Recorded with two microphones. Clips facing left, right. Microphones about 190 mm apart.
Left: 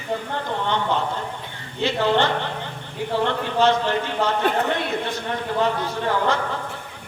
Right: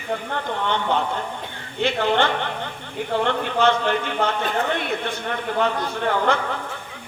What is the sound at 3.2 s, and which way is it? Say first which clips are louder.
A man's voice: left 1 dB; 55° right (ahead or behind).